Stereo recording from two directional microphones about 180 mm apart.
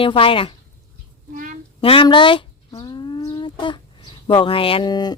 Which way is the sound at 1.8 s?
30° left (ahead or behind).